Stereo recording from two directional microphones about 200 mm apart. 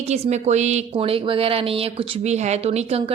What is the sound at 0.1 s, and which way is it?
A woman's voice, 35° right (ahead or behind).